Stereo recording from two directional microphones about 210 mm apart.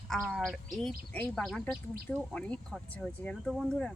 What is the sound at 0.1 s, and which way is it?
Speech, centre (ahead or behind).